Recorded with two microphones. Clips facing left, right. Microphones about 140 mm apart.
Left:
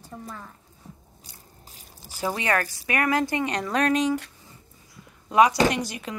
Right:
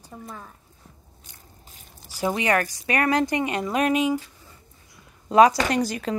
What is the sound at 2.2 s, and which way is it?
Speech, 15° right (ahead or behind).